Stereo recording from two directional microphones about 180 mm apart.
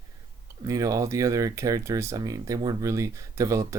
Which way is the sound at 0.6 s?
20° right (ahead or behind).